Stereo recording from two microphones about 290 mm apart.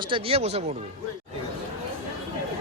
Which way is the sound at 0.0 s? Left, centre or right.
Centre.